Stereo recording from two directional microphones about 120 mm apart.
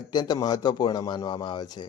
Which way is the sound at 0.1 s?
35° left (ahead or behind).